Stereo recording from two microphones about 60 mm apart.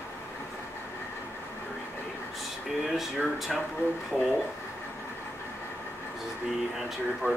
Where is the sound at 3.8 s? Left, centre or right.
Left.